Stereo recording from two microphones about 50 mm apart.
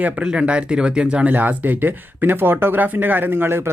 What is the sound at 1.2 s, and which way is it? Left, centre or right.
Speech, right.